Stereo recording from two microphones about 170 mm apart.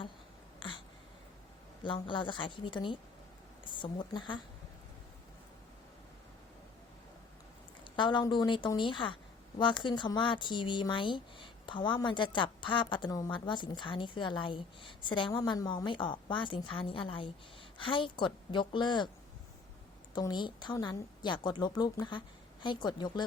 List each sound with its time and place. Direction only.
0.6 s a sound: 30° left (ahead or behind)
1.8 s a woman's voice: 30° left (ahead or behind)
7.9 s speech: 25° left (ahead or behind)
20.1 s speech: 25° left (ahead or behind)